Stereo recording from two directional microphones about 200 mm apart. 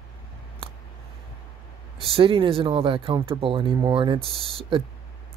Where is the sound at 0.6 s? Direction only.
25° right (ahead or behind).